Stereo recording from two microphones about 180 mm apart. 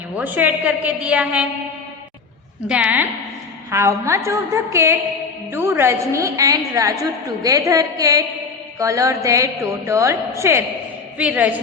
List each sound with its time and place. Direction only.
0.2 s a woman's voice: 10° right (ahead or behind)
2.6 s a woman's voice: 5° right (ahead or behind)